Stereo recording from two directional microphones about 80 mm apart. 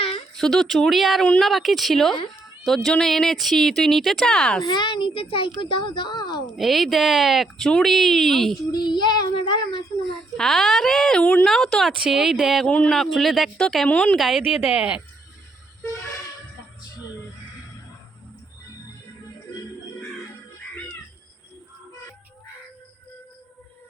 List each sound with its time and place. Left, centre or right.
0.3 s speech: centre
4.6 s a child's voice: left
6.6 s speech: centre
8.7 s child singing: left
10.3 s speech: centre
11.9 s speech: centre
12.6 s speech: centre
12.9 s speech: centre
13.9 s speech: centre
14.2 s speech: centre
14.6 s speech: centre